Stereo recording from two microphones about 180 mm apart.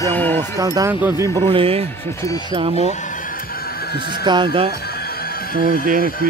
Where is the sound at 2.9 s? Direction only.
45° left (ahead or behind); by 4.3 s 60° left (ahead or behind).